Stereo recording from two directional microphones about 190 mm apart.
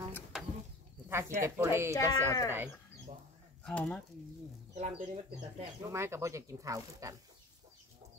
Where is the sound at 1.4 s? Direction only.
15° right (ahead or behind).